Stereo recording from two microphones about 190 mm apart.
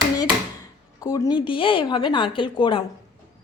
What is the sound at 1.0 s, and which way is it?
A woman's voice, 20° left (ahead or behind).